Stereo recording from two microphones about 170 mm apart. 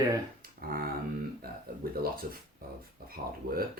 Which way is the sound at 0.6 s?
60° right (ahead or behind).